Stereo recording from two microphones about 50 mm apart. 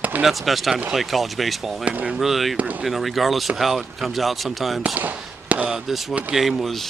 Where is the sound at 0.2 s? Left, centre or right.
Centre.